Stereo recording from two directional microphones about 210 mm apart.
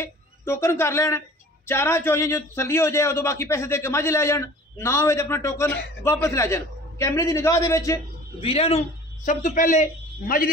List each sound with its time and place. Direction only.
0.0 s a man's voice: 10° left (ahead or behind)
8.5 s a man's voice: 30° left (ahead or behind); by 10.5 s 45° left (ahead or behind)